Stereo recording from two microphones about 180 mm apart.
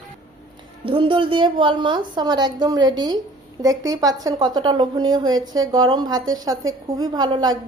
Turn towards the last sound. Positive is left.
turn(degrees=-20)  # may be behind; listen again after turning